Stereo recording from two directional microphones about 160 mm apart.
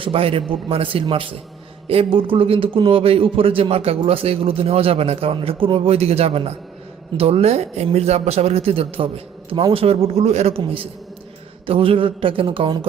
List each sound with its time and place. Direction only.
0.0 s a man's voice: 35° right (ahead or behind)